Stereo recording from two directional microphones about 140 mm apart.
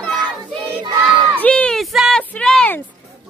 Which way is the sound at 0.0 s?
10° left (ahead or behind).